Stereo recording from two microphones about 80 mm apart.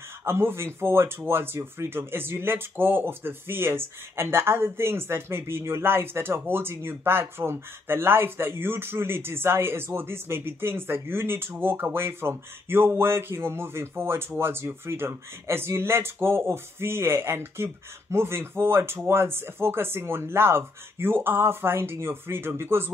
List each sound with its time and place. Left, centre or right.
0.2 s speech: right